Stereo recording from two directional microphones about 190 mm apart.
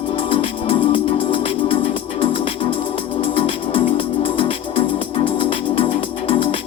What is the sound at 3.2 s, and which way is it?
Music, 30° left (ahead or behind).